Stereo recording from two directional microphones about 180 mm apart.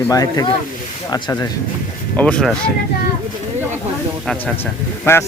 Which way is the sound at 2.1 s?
5° left (ahead or behind).